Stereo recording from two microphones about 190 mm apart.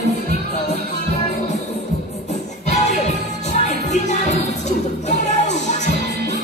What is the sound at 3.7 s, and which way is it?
Music, 35° left (ahead or behind).